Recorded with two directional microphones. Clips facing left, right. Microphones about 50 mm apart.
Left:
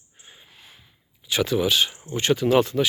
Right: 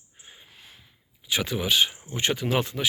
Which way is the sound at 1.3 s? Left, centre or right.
Centre.